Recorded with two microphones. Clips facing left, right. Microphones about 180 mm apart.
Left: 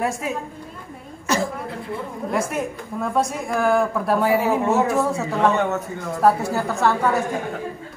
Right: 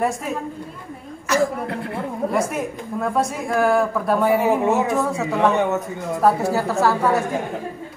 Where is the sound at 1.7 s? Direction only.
65° right (ahead or behind).